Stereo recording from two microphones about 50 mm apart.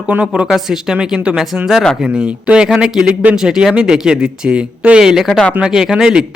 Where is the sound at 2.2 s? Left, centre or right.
Centre.